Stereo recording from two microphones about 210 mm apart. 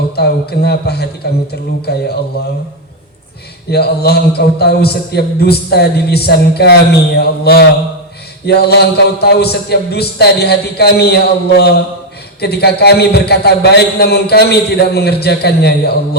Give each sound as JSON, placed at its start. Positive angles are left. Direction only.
{"t": 0.2, "sound": "a man's voice", "side_deg": 50}
{"t": 3.7, "sound": "a man's voice", "side_deg": 50}